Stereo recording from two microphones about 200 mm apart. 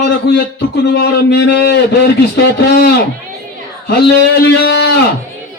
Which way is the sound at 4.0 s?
55° left (ahead or behind).